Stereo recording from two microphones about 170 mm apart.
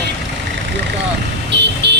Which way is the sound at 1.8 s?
85° right.